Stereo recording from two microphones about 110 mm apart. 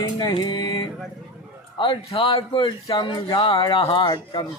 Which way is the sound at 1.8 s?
50° left (ahead or behind).